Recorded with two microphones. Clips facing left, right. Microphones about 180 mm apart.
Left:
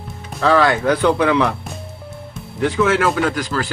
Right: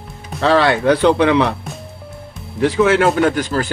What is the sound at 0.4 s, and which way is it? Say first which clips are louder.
Speech: right 1 dB; 35° right (ahead or behind).